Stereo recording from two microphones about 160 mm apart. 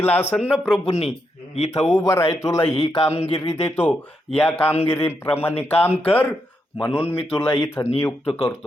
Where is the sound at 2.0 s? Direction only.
15° left (ahead or behind).